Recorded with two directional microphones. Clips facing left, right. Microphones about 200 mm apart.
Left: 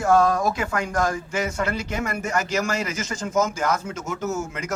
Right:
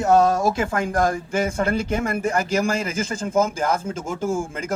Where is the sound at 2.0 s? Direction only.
30° right (ahead or behind).